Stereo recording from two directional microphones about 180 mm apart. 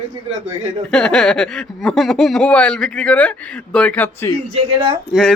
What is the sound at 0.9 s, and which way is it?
Speech, 5° left (ahead or behind).